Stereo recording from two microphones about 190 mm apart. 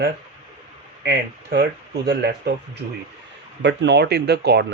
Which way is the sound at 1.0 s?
65° right (ahead or behind).